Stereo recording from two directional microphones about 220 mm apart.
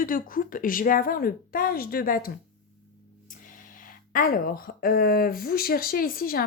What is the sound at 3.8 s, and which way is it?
Speech, 40° left (ahead or behind).